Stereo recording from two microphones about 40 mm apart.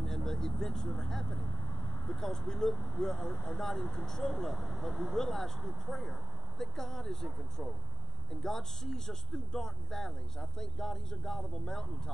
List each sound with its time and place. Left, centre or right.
0.0 s speech: centre
3.2 s speech: left
3.5 s speech: centre
8.3 s speech: centre